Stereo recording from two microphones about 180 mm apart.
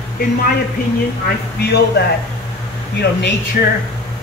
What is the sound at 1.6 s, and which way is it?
Speech, 65° left (ahead or behind).